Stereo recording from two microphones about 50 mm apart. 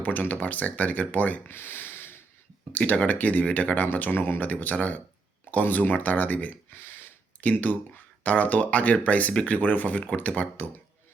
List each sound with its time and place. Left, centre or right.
0.0 s speech: left
1.5 s a sound: left
2.7 s speech: left
4.4 s speech: left
6.7 s speech: left